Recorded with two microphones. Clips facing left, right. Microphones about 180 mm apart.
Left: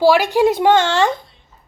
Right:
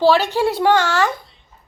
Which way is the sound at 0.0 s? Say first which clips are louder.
Left 2 dB; 15° left (ahead or behind).